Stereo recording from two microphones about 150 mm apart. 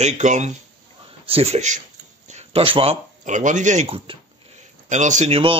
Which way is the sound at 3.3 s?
55° right (ahead or behind).